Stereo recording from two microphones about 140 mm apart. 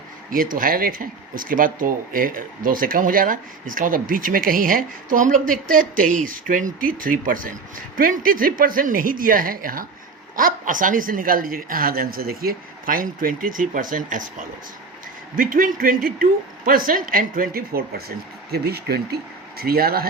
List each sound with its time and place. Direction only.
0.3 s speech: 85° right
10.3 s speech: 75° right (ahead or behind)
15.4 s speech: 90° right
19.5 s speech: 90° right